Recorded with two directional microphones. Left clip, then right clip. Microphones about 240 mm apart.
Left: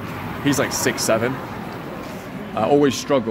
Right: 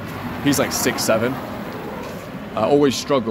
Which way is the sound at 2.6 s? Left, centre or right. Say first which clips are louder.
Right 1 dB; centre.